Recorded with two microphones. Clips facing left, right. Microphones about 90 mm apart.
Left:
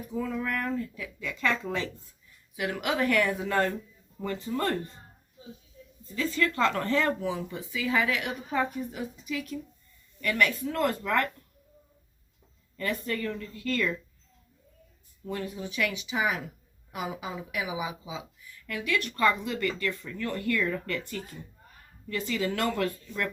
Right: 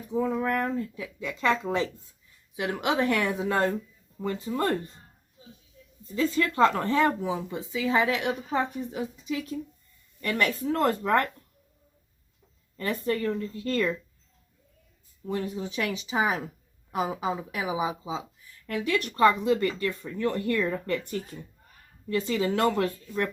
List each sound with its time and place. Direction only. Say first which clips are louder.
0.1 s speech: right 5 dB; 25° right (ahead or behind)
6.1 s speech: right 4 dB; 25° right (ahead or behind)
12.7 s speech: right 3 dB; 30° right (ahead or behind)
15.3 s speech: right 4 dB; 25° right (ahead or behind)